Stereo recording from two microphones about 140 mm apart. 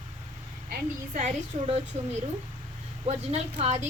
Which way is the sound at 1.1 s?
60° right (ahead or behind).